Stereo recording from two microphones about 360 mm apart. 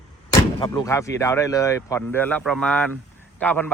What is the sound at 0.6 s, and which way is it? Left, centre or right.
A man's voice, centre.